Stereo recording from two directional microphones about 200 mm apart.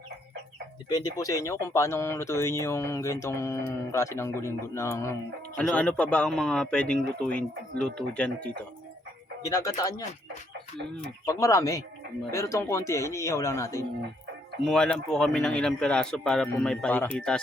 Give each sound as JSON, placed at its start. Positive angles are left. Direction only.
{"t": 0.9, "sound": "a man's voice", "side_deg": 20}
{"t": 9.4, "sound": "speech", "side_deg": 15}
{"t": 11.3, "sound": "speech", "side_deg": 15}
{"t": 14.6, "sound": "a man's voice", "side_deg": 5}